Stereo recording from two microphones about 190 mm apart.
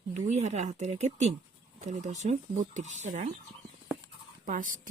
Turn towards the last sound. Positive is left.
turn(degrees=-45)  # may be behind; listen again after turning